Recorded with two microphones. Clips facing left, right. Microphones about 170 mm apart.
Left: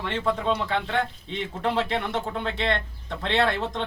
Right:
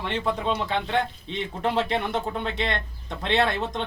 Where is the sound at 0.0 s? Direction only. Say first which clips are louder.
Left 1 dB; 15° right (ahead or behind).